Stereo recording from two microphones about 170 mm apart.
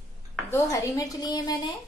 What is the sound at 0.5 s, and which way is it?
A woman's voice, 20° left (ahead or behind).